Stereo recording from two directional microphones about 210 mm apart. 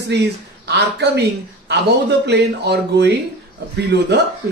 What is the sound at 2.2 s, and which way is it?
Speech, 50° right (ahead or behind).